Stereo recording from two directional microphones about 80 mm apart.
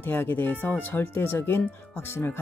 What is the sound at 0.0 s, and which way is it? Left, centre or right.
Speech, left.